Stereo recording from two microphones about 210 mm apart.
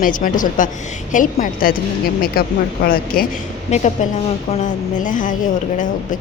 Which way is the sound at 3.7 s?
35° left (ahead or behind).